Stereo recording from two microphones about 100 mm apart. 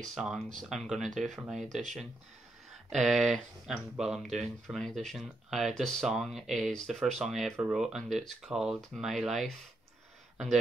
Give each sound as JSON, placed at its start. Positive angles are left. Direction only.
{"t": 0.2, "sound": "speech", "side_deg": 0}
{"t": 8.4, "sound": "speech", "side_deg": -5}